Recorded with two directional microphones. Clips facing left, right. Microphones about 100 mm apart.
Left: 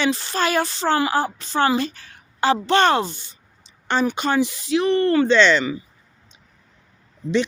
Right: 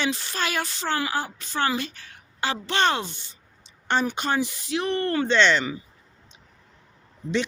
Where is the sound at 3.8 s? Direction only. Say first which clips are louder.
Left 3 dB; 90° left.